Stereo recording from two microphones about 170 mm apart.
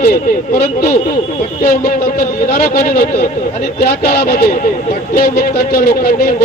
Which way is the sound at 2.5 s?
60° left (ahead or behind).